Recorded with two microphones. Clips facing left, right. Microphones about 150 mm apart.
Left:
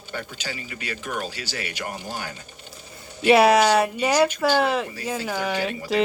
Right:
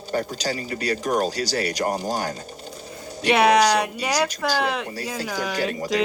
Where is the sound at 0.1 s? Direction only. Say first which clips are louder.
Right 8 dB; 40° right (ahead or behind).